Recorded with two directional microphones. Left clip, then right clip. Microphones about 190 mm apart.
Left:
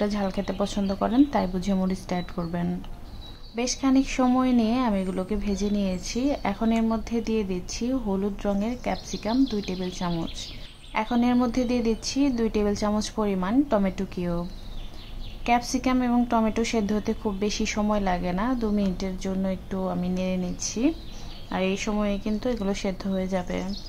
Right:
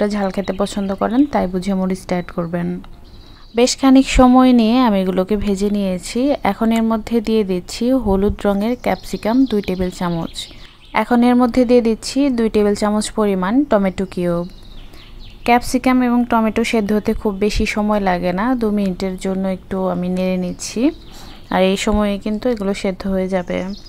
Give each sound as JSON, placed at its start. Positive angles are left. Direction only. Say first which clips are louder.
{"t": 0.0, "sound": "a woman's voice", "louder": "right 8 dB", "side_deg": -30}
{"t": 3.5, "sound": "a woman's voice", "louder": "right 12 dB", "side_deg": -50}
{"t": 15.4, "sound": "a woman's voice", "louder": "right 9 dB", "side_deg": -40}
{"t": 21.5, "sound": "a woman's voice", "louder": "right 12 dB", "side_deg": -50}